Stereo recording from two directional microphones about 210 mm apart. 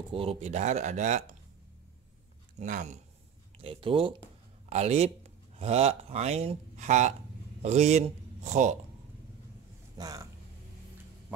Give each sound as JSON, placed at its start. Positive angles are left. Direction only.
{"t": 0.1, "sound": "speech", "side_deg": -25}
{"t": 2.6, "sound": "speech", "side_deg": -35}
{"t": 3.5, "sound": "speech", "side_deg": -25}
{"t": 9.9, "sound": "speech", "side_deg": -15}